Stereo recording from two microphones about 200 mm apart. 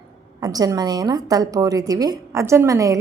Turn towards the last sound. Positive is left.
turn(degrees=-15)  # may be behind; listen again after turning